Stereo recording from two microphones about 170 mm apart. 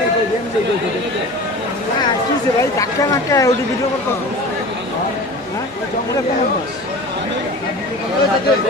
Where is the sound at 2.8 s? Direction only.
20° left (ahead or behind).